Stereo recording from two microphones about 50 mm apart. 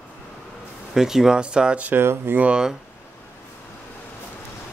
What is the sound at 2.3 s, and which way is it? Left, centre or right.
Speech, right.